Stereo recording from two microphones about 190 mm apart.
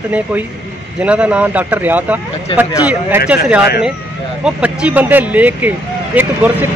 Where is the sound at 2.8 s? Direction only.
5° right (ahead or behind).